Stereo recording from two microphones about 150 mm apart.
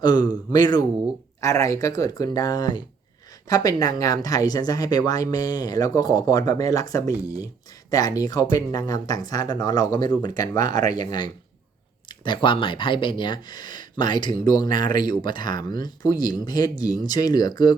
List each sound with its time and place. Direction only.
0.0 s speech: 25° left (ahead or behind)